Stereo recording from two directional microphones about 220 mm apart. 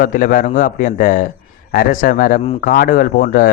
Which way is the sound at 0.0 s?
40° left (ahead or behind).